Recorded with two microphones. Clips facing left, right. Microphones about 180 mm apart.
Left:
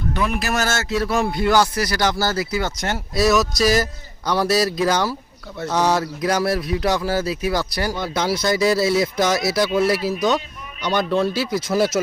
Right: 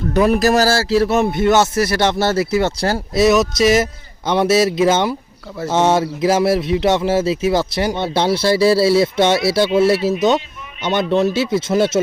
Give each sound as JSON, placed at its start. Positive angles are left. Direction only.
{"t": 0.1, "sound": "speech", "side_deg": -40}
{"t": 3.4, "sound": "speech", "side_deg": 0}
{"t": 4.5, "sound": "speech", "side_deg": -25}